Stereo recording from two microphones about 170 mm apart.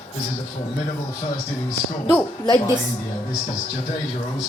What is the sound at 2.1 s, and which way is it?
Speech, 20° left (ahead or behind).